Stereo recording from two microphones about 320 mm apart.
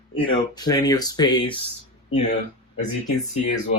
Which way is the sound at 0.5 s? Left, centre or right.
Centre.